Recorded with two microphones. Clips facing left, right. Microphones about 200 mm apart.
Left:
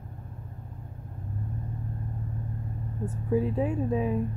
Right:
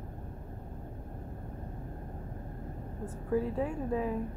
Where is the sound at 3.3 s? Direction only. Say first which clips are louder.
Left 4 dB; 20° left (ahead or behind).